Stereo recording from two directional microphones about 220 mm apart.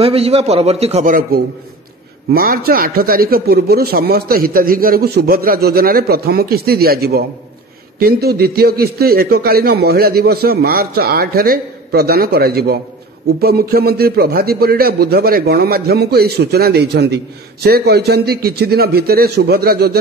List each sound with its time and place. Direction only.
0.0 s a man's voice: 25° right (ahead or behind); by 20.0 s 45° right (ahead or behind)